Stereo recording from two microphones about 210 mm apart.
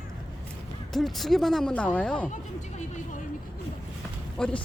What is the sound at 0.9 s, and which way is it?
Speech, centre (ahead or behind).